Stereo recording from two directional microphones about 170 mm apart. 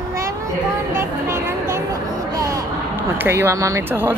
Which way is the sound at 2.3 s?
20° right (ahead or behind).